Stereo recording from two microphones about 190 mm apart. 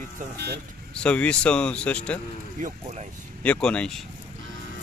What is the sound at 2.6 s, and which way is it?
Speech, 40° right (ahead or behind).